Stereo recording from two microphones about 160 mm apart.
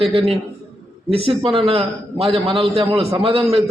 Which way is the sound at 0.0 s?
35° right (ahead or behind).